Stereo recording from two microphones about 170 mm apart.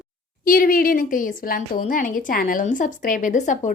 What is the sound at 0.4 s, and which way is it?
A woman's voice, 55° left (ahead or behind).